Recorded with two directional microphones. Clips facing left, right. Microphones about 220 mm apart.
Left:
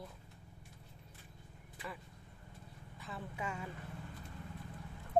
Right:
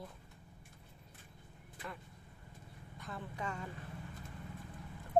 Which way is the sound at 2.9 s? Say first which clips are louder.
Even; 5° left (ahead or behind).